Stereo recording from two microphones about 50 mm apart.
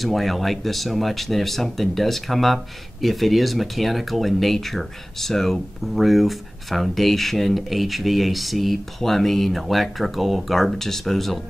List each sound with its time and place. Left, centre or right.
0.0 s speech: centre